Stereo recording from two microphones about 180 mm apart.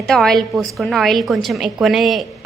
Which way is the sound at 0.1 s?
Centre (ahead or behind).